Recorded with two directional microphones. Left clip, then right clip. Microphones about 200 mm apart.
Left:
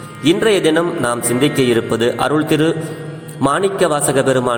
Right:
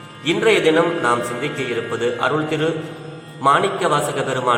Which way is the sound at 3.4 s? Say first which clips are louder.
Left 1 dB; 35° left (ahead or behind).